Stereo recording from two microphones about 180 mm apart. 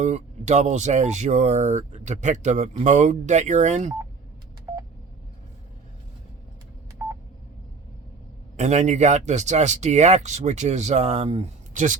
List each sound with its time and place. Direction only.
0.0 s speech: 40° right (ahead or behind)
4.7 s telephone dialing: 10° right (ahead or behind)
7.0 s telephone dialing: 15° right (ahead or behind)
8.5 s speech: 40° right (ahead or behind)